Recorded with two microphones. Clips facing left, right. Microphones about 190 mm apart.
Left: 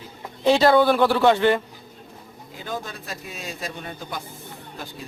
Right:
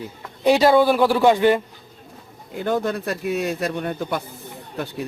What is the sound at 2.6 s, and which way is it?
Speech, 60° right (ahead or behind).